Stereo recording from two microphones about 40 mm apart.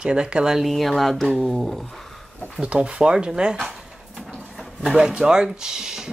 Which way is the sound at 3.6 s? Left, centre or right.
Centre.